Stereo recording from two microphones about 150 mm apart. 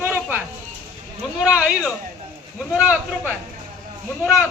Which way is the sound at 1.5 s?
5° right (ahead or behind).